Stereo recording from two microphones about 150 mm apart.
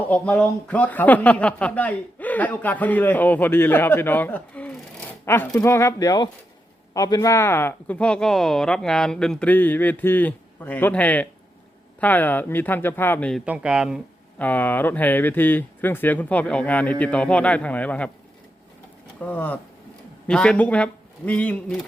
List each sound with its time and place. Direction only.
0.1 s speech: 10° left (ahead or behind)
13.4 s speech: 5° right (ahead or behind)
14.3 s speech: 10° left (ahead or behind)
19.2 s speech: 10° left (ahead or behind)